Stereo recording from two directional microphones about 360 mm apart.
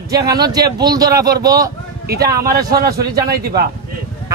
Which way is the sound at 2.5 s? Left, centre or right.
Right.